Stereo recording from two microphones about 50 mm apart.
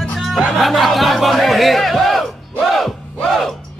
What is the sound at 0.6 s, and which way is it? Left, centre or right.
Speech, centre.